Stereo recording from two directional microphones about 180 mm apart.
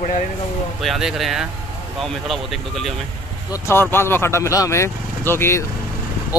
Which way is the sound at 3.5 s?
15° left (ahead or behind).